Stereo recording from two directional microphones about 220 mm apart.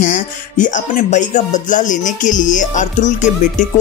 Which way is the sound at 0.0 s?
35° left (ahead or behind).